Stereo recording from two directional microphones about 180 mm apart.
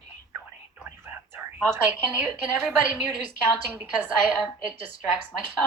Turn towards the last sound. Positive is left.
turn(degrees=-10)  # may be behind; listen again after turning